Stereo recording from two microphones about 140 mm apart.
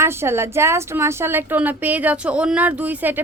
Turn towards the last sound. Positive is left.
turn(degrees=-15)  # may be behind; listen again after turning